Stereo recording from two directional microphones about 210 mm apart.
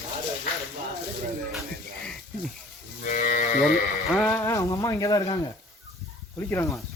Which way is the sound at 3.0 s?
40° left (ahead or behind).